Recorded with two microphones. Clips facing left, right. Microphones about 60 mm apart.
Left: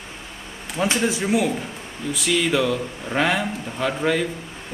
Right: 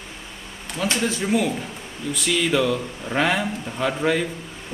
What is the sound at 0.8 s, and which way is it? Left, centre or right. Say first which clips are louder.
Speech: left 2 dB; centre.